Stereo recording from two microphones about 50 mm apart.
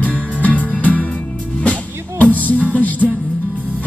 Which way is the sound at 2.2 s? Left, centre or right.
Left.